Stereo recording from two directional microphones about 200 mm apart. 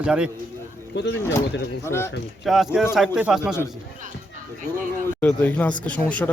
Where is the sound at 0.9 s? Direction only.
60° left (ahead or behind).